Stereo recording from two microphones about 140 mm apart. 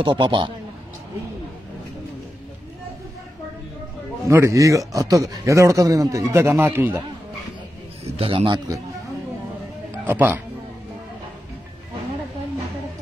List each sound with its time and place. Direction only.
0.0 s a man's voice: 35° right (ahead or behind)
4.3 s speech: 20° right (ahead or behind)
8.0 s a man's voice: 40° right (ahead or behind)
10.0 s speech: 15° right (ahead or behind)